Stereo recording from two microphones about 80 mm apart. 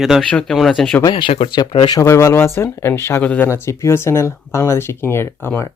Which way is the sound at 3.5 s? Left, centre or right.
Left.